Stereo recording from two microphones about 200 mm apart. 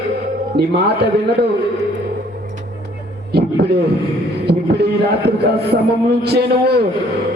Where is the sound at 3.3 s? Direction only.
55° right (ahead or behind).